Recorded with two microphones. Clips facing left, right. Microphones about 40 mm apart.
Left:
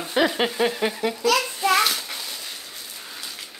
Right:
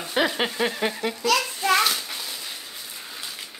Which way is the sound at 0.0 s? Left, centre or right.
Centre.